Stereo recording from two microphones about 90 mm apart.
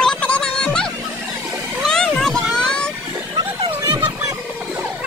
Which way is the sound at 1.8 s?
5° left (ahead or behind).